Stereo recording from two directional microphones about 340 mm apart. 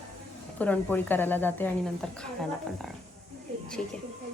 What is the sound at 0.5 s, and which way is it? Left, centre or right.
A woman's voice, centre.